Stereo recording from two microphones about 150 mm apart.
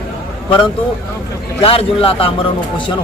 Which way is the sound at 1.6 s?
40° left (ahead or behind).